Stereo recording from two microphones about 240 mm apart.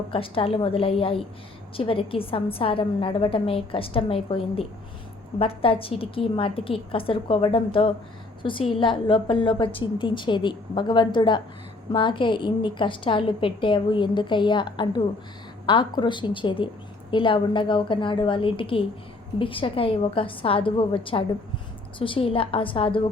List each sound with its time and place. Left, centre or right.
0.1 s a woman's voice: left